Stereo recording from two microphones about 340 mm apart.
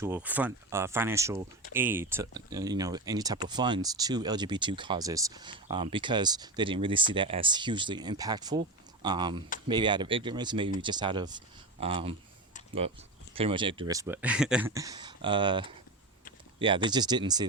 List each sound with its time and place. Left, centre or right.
0.0 s speech: centre